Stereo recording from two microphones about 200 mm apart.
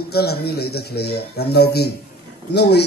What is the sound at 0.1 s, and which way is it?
A man's voice, 55° left (ahead or behind).